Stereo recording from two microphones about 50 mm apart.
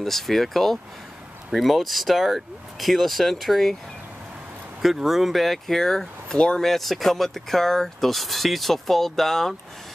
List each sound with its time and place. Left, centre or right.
0.0 s speech: centre
4.8 s speech: centre
6.6 s speech: centre